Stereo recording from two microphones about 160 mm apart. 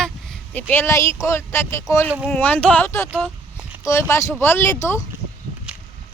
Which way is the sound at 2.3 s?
10° left (ahead or behind).